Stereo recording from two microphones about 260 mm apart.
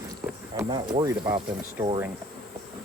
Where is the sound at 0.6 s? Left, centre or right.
Centre.